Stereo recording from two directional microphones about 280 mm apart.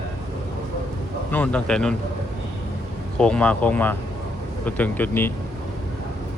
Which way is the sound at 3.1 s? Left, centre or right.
Centre.